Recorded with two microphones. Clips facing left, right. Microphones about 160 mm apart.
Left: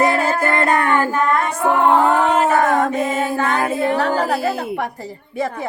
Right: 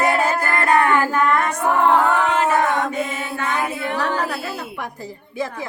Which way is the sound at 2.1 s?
35° left (ahead or behind).